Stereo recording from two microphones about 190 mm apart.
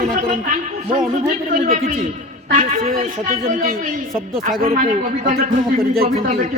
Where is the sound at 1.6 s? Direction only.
45° right (ahead or behind).